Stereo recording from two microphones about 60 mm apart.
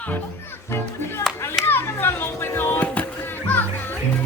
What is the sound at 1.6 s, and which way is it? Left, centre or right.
Children playing, left.